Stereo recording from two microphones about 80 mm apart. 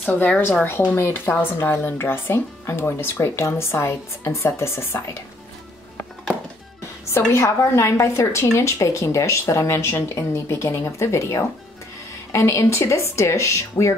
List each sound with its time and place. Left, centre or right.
0.0 s a woman's voice: centre
7.1 s speech: left